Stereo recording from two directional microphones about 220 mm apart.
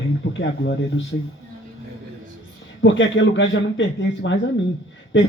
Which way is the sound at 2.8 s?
55° left (ahead or behind).